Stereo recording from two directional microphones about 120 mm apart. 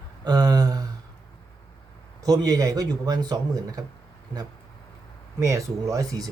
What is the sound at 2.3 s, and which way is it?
Speech, 30° right (ahead or behind).